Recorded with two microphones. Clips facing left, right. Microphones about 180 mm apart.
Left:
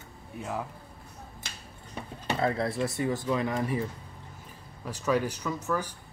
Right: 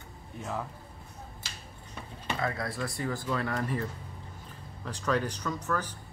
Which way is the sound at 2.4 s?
25° left (ahead or behind).